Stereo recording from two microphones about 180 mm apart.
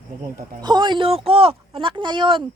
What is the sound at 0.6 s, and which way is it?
Speech, 25° right (ahead or behind).